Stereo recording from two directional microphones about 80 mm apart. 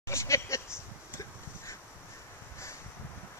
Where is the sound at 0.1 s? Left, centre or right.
Left.